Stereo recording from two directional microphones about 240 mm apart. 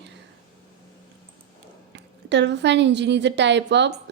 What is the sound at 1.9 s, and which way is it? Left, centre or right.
A woman's voice, right.